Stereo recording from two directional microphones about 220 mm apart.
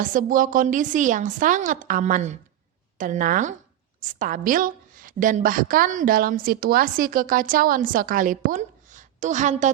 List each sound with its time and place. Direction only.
0.0 s a woman's voice: 40° right (ahead or behind)